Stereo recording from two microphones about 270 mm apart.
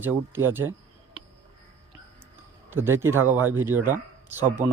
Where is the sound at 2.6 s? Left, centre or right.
Centre.